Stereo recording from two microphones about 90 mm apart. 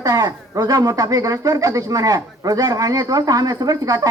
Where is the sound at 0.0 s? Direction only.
40° right (ahead or behind).